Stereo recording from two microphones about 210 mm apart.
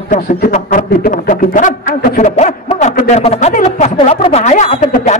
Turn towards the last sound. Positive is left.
turn(degrees=30)  # may be behind; listen again after turning